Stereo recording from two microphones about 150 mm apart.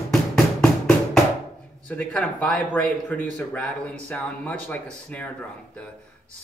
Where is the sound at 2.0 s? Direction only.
5° left (ahead or behind).